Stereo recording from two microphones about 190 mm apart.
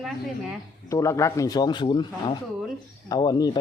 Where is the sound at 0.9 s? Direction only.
15° left (ahead or behind).